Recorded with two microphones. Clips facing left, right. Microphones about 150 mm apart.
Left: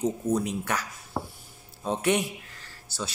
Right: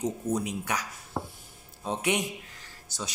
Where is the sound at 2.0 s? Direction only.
15° right (ahead or behind).